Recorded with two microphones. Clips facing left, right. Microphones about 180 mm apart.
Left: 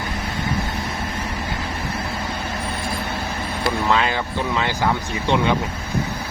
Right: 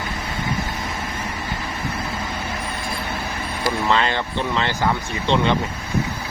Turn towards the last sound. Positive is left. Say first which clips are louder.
# even
turn(degrees=10)  # may be behind; listen again after turning